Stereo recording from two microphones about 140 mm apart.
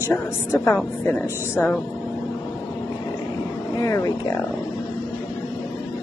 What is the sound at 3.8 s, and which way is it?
Speech, 25° left (ahead or behind).